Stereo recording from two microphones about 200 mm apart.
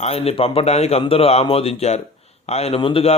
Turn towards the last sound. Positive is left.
turn(degrees=25)  # may be behind; listen again after turning